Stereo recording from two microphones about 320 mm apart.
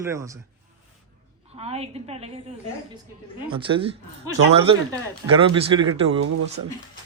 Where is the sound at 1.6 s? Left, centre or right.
Centre.